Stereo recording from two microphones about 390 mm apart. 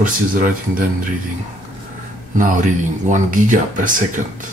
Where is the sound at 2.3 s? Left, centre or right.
Centre.